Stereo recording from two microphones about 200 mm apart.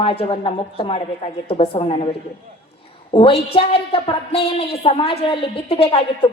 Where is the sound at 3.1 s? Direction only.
25° left (ahead or behind).